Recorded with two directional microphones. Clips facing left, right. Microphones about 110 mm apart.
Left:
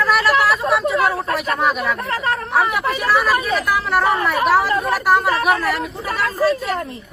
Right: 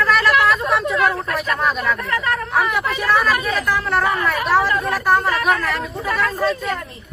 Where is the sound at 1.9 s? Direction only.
30° left (ahead or behind).